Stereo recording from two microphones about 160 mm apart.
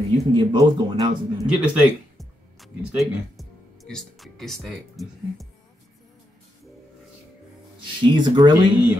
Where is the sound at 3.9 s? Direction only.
5° left (ahead or behind).